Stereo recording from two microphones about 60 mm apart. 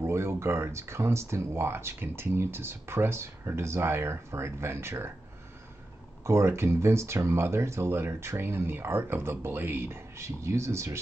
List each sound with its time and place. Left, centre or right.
0.0 s speech: right
6.2 s speech: right